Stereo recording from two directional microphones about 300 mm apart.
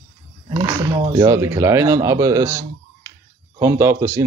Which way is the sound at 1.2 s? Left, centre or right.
Centre.